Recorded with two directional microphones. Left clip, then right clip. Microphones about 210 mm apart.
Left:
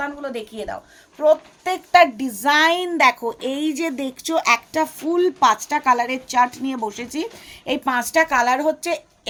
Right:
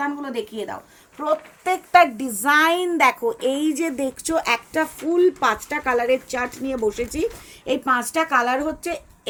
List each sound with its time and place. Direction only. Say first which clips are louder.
0.3 s a woman's voice: even; 30° left (ahead or behind)